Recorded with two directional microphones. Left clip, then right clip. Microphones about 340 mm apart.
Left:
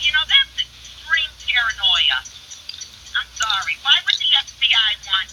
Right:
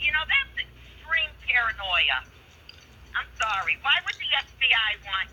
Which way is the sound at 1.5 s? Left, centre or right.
Centre.